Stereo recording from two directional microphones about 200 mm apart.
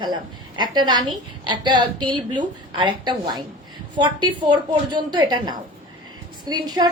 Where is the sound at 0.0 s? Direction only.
20° right (ahead or behind).